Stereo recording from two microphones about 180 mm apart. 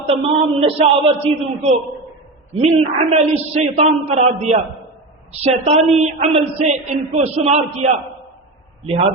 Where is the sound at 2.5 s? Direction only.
35° right (ahead or behind).